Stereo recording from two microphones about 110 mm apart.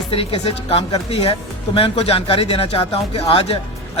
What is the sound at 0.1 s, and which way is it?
Speech, 60° left (ahead or behind).